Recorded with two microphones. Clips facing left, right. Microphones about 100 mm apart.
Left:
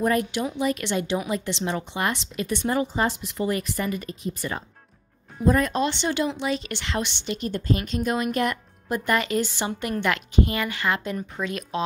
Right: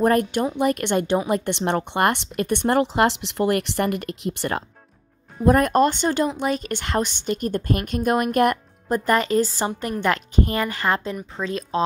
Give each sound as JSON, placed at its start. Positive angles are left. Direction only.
{"t": 0.0, "sound": "speech", "side_deg": -50}
{"t": 5.4, "sound": "speech", "side_deg": -55}
{"t": 8.8, "sound": "a woman's voice", "side_deg": -40}